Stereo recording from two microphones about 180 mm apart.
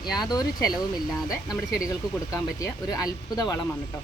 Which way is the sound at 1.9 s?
20° left (ahead or behind).